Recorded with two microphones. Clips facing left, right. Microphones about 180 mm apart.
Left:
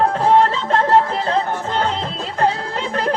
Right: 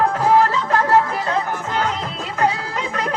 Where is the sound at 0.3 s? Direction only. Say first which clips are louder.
Left 1 dB; 30° left (ahead or behind).